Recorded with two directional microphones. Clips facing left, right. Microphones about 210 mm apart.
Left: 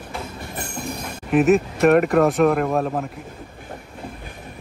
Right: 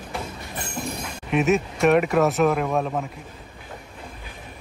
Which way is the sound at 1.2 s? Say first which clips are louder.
Left 5 dB; centre (ahead or behind).